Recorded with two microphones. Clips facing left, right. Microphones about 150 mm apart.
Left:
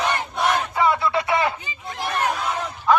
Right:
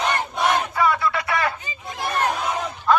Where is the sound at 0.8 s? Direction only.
25° left (ahead or behind).